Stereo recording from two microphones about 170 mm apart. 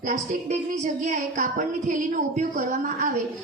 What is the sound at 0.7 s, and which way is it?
A woman's voice, 50° right (ahead or behind).